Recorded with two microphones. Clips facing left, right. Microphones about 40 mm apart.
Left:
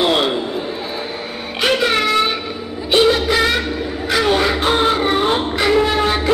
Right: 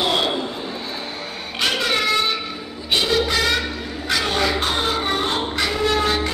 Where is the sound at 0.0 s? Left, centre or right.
Centre.